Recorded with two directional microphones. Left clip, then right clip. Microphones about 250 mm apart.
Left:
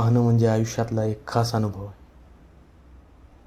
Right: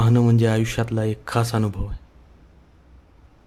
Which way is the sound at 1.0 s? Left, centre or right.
Centre.